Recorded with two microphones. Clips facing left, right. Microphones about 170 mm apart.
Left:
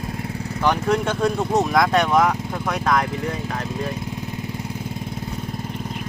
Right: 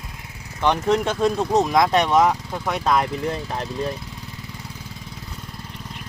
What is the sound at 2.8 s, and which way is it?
Speech, 20° right (ahead or behind).